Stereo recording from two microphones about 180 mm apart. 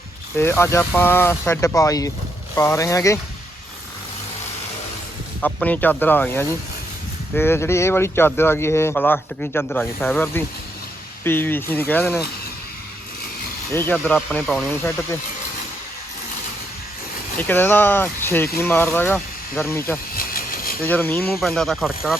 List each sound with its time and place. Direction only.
0.3 s speech: 15° left (ahead or behind)
5.4 s speech: 5° left (ahead or behind)
13.7 s speech: 10° left (ahead or behind)
17.3 s speech: 10° left (ahead or behind)
20.1 s a sound: 55° left (ahead or behind)
20.8 s speech: 10° left (ahead or behind)